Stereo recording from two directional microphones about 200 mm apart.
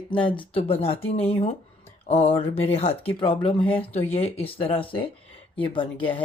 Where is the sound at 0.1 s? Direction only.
25° left (ahead or behind).